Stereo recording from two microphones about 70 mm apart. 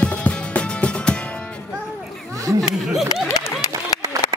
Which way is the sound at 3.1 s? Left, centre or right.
Left.